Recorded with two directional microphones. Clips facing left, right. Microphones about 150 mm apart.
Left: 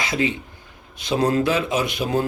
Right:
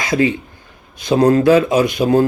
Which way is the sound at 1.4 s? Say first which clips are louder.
Right 9 dB; 45° right (ahead or behind).